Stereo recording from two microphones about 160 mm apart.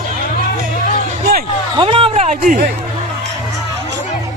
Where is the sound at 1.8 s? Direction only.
35° right (ahead or behind); by 2.6 s 55° right (ahead or behind).